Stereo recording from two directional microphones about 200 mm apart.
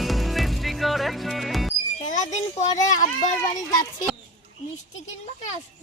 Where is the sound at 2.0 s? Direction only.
40° left (ahead or behind).